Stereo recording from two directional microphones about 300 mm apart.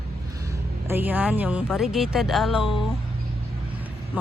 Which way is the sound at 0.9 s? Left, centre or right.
Centre.